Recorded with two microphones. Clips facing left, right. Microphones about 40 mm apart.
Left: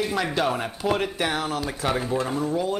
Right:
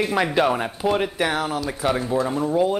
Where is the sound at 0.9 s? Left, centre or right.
Centre.